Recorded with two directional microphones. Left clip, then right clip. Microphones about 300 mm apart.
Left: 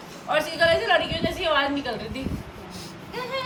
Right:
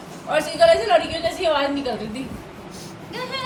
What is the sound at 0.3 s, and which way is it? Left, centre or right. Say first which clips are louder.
A man's voice: right 5 dB; centre.